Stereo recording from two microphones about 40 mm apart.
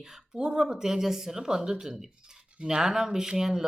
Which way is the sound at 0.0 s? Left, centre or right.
Centre.